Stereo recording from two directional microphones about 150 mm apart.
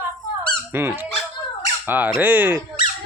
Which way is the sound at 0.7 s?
15° right (ahead or behind).